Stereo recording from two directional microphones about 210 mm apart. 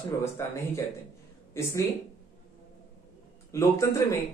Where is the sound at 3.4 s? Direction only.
15° left (ahead or behind).